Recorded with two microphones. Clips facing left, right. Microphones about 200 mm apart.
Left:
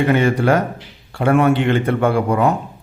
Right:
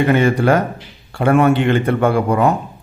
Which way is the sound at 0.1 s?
50° right (ahead or behind).